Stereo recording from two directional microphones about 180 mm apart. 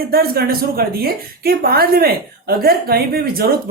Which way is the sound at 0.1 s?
60° right (ahead or behind).